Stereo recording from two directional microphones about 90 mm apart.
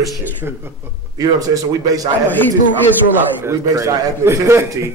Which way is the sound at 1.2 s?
40° right (ahead or behind).